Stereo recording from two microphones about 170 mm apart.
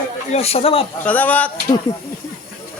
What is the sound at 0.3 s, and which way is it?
Speech, 35° left (ahead or behind).